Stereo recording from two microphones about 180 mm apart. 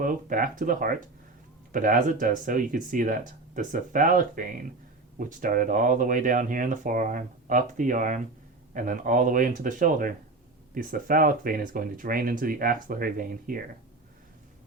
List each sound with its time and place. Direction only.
0.0 s speech: 50° right (ahead or behind)